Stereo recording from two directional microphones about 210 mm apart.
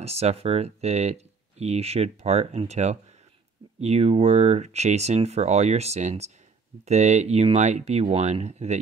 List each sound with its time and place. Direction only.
0.0 s speech: 30° right (ahead or behind)